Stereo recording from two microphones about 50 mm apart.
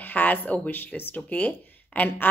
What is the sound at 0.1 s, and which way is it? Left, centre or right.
A woman's voice, left.